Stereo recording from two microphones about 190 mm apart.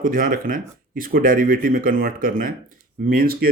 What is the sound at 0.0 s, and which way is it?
Speech, 45° right (ahead or behind).